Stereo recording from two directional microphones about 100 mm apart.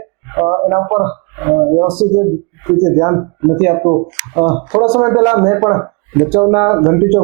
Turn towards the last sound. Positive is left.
turn(degrees=-20)  # may be behind; listen again after turning